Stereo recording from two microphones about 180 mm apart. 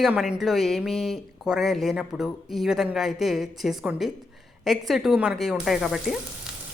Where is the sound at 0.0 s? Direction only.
5° right (ahead or behind).